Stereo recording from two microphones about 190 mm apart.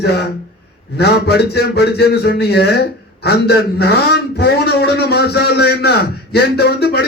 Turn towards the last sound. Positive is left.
turn(degrees=60)  # may be behind; listen again after turning